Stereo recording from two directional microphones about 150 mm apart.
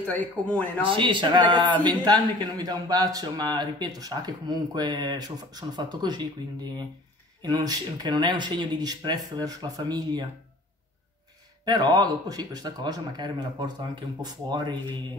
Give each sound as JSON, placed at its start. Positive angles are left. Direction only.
{"t": 0.0, "sound": "a man's voice", "side_deg": 10}
{"t": 0.8, "sound": "a man's voice", "side_deg": -35}
{"t": 11.6, "sound": "speech", "side_deg": -25}